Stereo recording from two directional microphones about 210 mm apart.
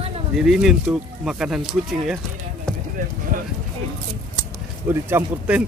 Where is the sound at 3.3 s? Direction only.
40° right (ahead or behind).